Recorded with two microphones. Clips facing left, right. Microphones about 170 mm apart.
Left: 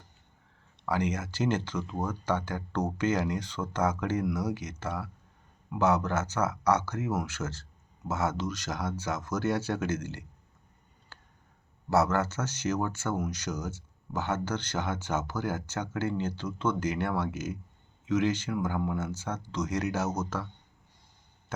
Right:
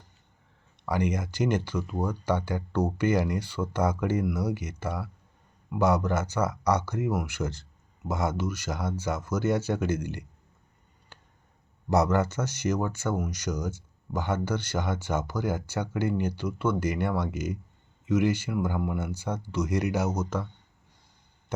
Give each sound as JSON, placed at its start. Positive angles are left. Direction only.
{"t": 0.9, "sound": "speech", "side_deg": -15}
{"t": 11.1, "sound": "a sound", "side_deg": -20}
{"t": 11.9, "sound": "speech", "side_deg": -15}